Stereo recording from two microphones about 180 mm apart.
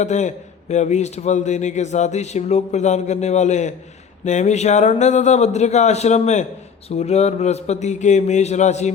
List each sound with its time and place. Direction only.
0.0 s a man's voice: 40° left (ahead or behind)